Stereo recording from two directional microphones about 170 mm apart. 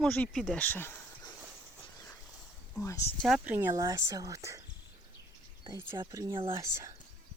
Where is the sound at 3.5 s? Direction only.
10° right (ahead or behind).